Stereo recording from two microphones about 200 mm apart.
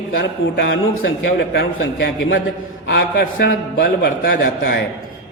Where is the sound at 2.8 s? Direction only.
55° left (ahead or behind).